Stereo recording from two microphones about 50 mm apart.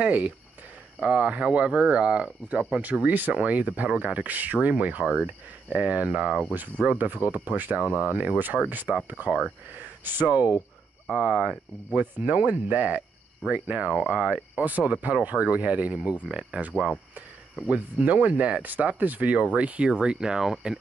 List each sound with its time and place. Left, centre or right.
0.0 s speech: right
6.8 s speech: right
7.7 s speech: right
10.3 s speech: right
11.9 s speech: right
13.9 s speech: centre
14.6 s speech: right
19.9 s speech: centre